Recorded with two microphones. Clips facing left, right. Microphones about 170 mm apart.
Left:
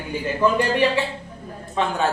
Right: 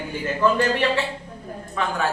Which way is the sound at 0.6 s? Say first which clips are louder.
Left 2 dB; 15° left (ahead or behind).